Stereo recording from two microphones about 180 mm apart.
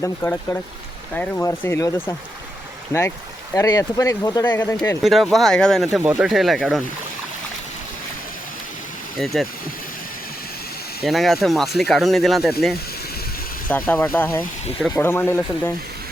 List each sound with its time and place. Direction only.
0.0 s speech: 10° left (ahead or behind)
3.5 s speech: 20° left (ahead or behind)
5.0 s speech: centre (ahead or behind)
9.1 s speech: centre (ahead or behind)
11.0 s speech: centre (ahead or behind)
13.7 s speech: 10° left (ahead or behind)